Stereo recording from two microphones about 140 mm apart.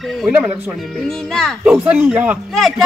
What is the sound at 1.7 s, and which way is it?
Speech, 10° right (ahead or behind).